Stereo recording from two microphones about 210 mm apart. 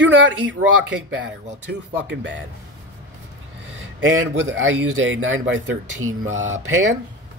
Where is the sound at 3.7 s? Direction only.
60° right (ahead or behind).